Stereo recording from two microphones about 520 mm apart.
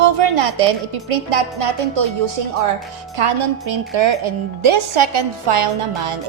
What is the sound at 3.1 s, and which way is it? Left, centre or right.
A woman's voice, right.